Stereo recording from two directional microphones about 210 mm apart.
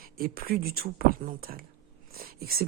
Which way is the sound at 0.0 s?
45° right (ahead or behind).